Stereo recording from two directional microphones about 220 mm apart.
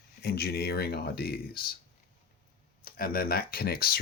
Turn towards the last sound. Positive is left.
turn(degrees=45)  # may be behind; listen again after turning